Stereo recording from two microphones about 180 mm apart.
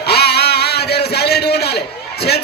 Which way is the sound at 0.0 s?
65° left (ahead or behind).